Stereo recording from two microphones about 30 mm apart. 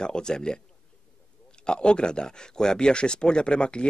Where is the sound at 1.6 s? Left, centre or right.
Left.